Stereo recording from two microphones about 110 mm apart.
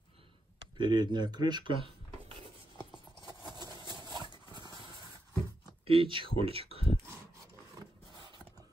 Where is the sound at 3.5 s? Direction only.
40° right (ahead or behind).